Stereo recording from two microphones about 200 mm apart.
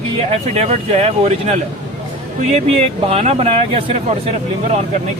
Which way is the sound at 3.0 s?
30° right (ahead or behind).